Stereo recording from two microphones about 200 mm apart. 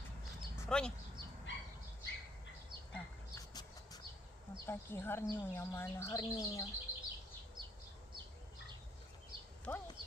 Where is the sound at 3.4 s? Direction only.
20° left (ahead or behind).